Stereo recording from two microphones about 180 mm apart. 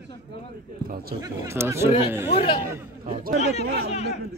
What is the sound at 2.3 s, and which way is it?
Speech, 30° left (ahead or behind).